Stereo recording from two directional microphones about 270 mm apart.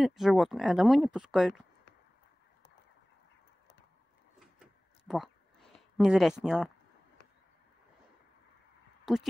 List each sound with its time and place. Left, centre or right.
0.0 s speech: centre
4.6 s a sound: centre
9.0 s speech: centre